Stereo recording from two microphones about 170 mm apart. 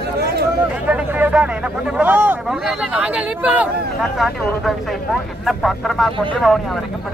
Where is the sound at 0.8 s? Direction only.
10° right (ahead or behind).